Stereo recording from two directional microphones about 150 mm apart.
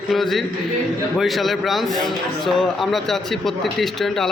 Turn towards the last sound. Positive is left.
turn(degrees=0)  # may be behind; listen again after turning